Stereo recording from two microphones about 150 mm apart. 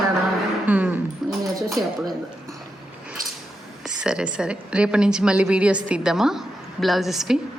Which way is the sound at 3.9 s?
5° right (ahead or behind).